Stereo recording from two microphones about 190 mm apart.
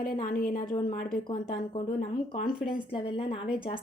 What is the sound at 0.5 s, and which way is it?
Speech, 25° left (ahead or behind).